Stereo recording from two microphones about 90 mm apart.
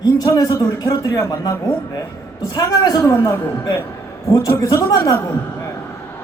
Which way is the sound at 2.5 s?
50° left (ahead or behind).